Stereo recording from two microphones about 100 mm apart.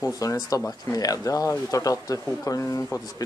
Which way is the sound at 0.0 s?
35° left (ahead or behind).